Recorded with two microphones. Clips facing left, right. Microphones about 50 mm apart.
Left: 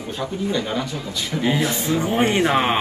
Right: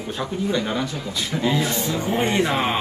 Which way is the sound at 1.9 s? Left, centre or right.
Left.